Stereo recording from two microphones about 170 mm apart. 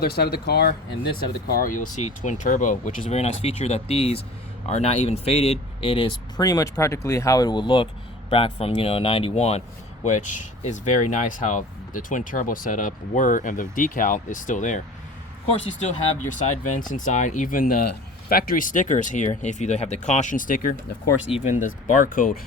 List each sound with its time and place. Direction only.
0.0 s speech: 65° left (ahead or behind)
1.5 s speech: 55° left (ahead or behind)
16.6 s speech: 50° left (ahead or behind)